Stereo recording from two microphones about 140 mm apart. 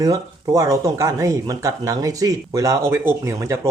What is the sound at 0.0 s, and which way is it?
Speech, 25° right (ahead or behind).